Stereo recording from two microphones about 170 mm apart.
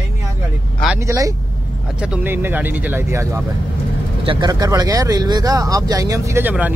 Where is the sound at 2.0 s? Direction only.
10° right (ahead or behind).